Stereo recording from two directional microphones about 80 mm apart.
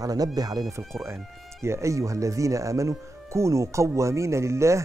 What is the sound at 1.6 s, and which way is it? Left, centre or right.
Speech, right.